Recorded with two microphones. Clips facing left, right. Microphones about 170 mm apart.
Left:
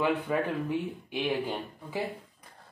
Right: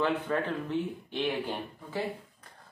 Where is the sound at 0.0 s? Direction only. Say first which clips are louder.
Left 1 dB; 10° left (ahead or behind).